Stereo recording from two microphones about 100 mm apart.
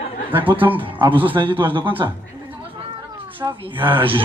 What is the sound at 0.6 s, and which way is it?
Speech, 20° right (ahead or behind).